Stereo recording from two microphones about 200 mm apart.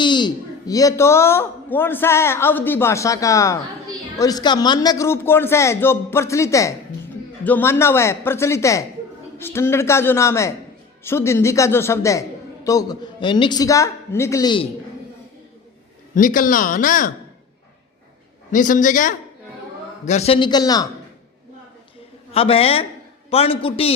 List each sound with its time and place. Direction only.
0.0 s a man's voice: 20° left (ahead or behind)
16.1 s speech: 45° left (ahead or behind)
18.5 s a woman's voice: 40° left (ahead or behind); by 20.8 s 20° left (ahead or behind)
22.3 s a woman's voice: 30° left (ahead or behind)